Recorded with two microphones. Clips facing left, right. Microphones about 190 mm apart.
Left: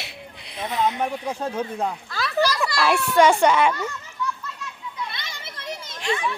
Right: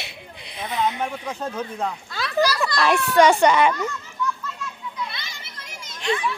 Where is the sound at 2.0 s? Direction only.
Centre (ahead or behind).